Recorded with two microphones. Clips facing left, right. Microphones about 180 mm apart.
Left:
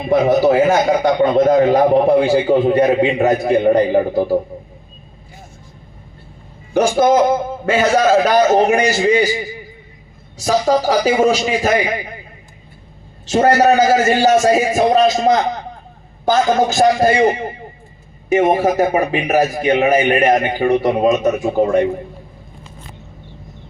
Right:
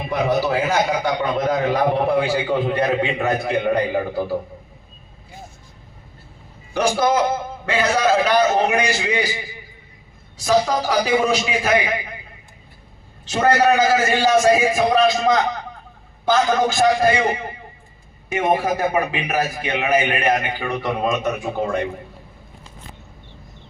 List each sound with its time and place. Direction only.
0.1 s a man's voice: 45° left (ahead or behind)
6.7 s a man's voice: 45° left (ahead or behind)
10.4 s a man's voice: 40° left (ahead or behind)
13.3 s a man's voice: 40° left (ahead or behind)